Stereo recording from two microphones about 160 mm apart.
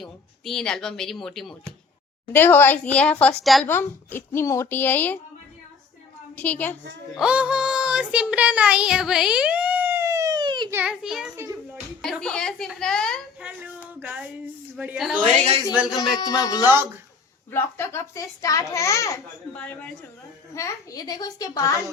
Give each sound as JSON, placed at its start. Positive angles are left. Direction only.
{"t": 0.0, "sound": "speech", "side_deg": 0}
{"t": 2.3, "sound": "speech", "side_deg": 15}
{"t": 3.7, "sound": "speech", "side_deg": 15}
{"t": 6.3, "sound": "speech", "side_deg": 10}
{"t": 7.2, "sound": "child singing", "side_deg": -5}
{"t": 10.7, "sound": "speech", "side_deg": -10}
{"t": 12.0, "sound": "a sound", "side_deg": 5}
{"t": 13.4, "sound": "a sound", "side_deg": -10}
{"t": 14.0, "sound": "child singing", "side_deg": -10}
{"t": 16.0, "sound": "a child's voice", "side_deg": 25}
{"t": 16.6, "sound": "child singing", "side_deg": -15}
{"t": 17.5, "sound": "a child's voice", "side_deg": 15}
{"t": 19.5, "sound": "speech", "side_deg": 5}
{"t": 20.5, "sound": "a child's voice", "side_deg": 20}